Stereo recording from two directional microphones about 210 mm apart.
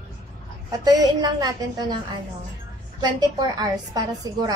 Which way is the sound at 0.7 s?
20° right (ahead or behind).